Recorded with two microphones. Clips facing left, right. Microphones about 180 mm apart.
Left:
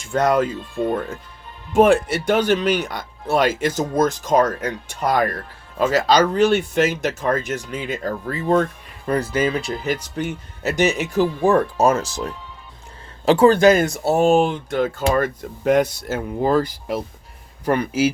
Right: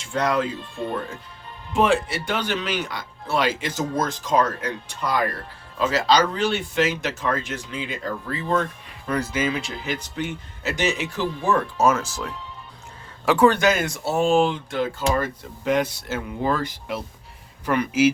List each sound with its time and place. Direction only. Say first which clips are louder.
0.1 s speech: left 5 dB; 45° left (ahead or behind)